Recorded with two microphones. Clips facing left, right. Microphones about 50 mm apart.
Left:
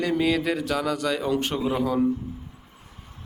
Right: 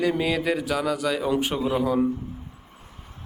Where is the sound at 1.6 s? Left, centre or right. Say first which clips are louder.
Right 1 dB; centre.